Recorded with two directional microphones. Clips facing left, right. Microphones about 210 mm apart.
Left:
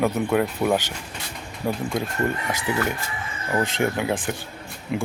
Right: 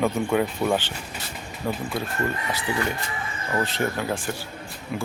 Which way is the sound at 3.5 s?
15° left (ahead or behind).